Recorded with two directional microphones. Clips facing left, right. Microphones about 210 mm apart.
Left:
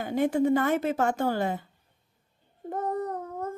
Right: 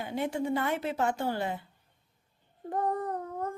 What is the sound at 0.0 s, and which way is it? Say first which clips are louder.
Speech: left 7 dB; 50° left (ahead or behind).